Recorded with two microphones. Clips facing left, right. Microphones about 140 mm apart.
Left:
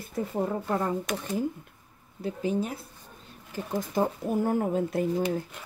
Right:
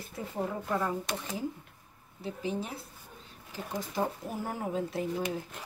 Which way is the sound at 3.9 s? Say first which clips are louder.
Left 7 dB; 50° left (ahead or behind).